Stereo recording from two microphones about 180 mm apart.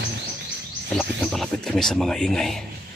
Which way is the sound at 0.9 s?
5° left (ahead or behind).